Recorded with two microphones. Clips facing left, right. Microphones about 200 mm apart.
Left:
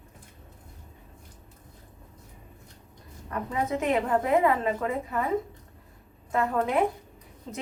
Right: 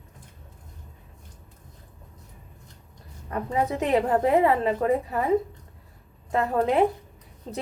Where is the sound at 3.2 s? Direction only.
35° right (ahead or behind).